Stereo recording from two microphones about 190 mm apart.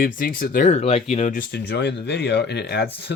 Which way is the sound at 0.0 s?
50° left (ahead or behind).